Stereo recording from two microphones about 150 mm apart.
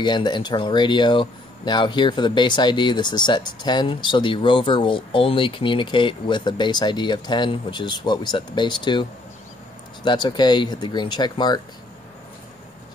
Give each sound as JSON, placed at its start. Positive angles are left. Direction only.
{"t": 0.0, "sound": "speech", "side_deg": 30}
{"t": 10.0, "sound": "speech", "side_deg": 30}